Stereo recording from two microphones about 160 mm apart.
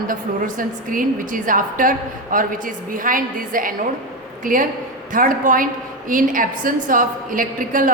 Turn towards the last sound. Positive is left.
turn(degrees=-60)  # may be behind; listen again after turning